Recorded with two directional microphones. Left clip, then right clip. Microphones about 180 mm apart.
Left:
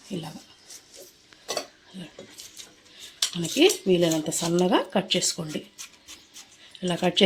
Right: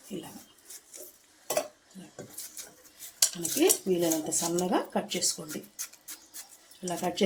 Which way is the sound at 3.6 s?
55° left (ahead or behind).